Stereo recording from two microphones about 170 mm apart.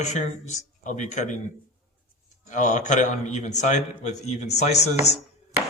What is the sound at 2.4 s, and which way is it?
A man's voice, 45° left (ahead or behind).